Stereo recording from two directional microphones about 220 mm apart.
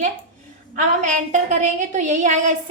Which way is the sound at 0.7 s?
35° right (ahead or behind).